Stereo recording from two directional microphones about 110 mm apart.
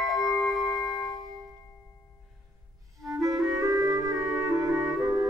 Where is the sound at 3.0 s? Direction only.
30° right (ahead or behind).